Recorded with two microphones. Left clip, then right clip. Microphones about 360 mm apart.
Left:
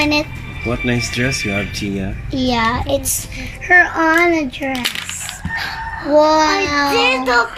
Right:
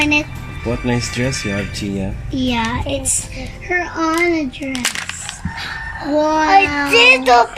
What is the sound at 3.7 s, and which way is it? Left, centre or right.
Speech, left.